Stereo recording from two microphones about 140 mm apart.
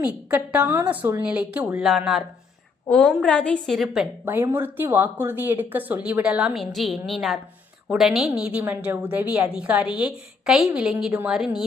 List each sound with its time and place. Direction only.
0.3 s a woman's voice: 10° right (ahead or behind)
4.3 s a woman's voice: 15° right (ahead or behind)